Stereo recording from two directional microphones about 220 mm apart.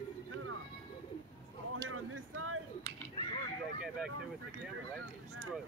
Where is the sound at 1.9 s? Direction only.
75° right (ahead or behind).